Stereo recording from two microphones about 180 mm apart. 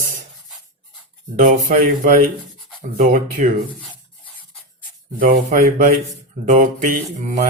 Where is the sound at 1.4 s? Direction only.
45° right (ahead or behind).